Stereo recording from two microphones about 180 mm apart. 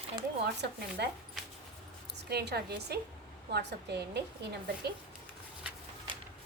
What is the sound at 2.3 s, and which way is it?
A woman's voice, 65° right (ahead or behind).